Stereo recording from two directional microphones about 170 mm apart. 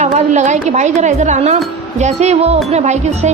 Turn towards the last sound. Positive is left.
turn(degrees=-40)  # may be behind; listen again after turning